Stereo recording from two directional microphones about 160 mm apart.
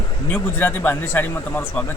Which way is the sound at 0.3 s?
10° left (ahead or behind).